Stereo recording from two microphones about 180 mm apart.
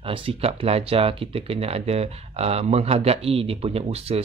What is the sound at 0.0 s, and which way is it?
Speech, 30° right (ahead or behind).